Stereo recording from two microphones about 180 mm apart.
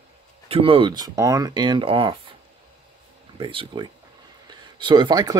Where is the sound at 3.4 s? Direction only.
30° right (ahead or behind).